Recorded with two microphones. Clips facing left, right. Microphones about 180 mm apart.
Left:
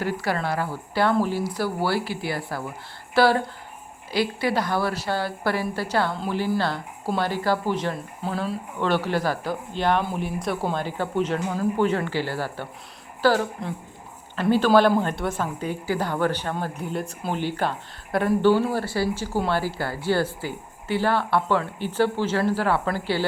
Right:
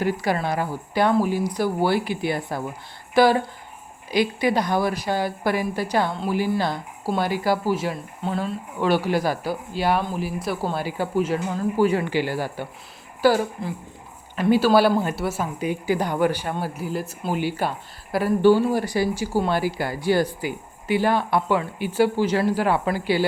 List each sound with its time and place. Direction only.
0.0 s a woman's voice: 15° right (ahead or behind); by 8.5 s centre (ahead or behind)
8.8 s speech: 10° right (ahead or behind)